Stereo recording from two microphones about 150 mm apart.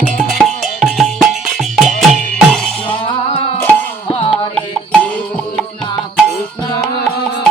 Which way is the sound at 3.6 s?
15° left (ahead or behind).